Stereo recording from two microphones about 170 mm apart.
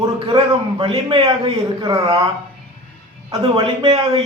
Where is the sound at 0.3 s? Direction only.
35° right (ahead or behind).